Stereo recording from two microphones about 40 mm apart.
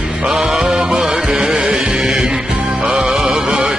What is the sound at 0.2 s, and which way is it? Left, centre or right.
Music, right.